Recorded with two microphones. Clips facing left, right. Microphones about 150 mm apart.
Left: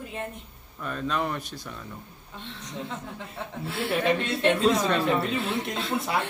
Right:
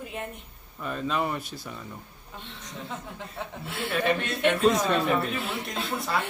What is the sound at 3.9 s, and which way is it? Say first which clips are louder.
Speech: left 1 dB; 25° left (ahead or behind).